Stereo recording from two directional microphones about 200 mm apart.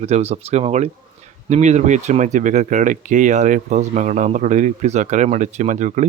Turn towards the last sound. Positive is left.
turn(degrees=-35)  # may be behind; listen again after turning